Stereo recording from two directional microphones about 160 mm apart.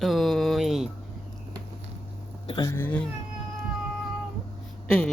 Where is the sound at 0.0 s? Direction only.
Centre (ahead or behind).